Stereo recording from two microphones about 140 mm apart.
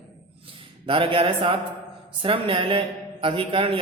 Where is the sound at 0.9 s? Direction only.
40° right (ahead or behind).